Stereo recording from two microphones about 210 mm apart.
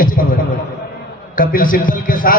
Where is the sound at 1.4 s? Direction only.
40° left (ahead or behind).